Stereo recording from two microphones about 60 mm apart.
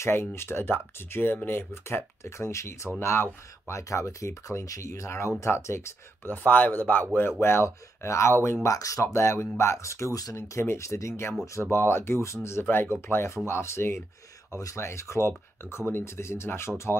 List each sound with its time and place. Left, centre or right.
0.0 s speech: left
6.3 s speech: left
8.6 s speech: left